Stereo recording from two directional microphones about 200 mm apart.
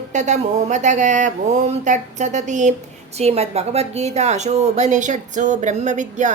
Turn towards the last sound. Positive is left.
turn(degrees=-35)  # may be behind; listen again after turning